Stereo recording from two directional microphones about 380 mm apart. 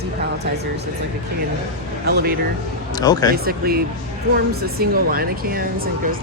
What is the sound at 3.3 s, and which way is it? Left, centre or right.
Speech, right.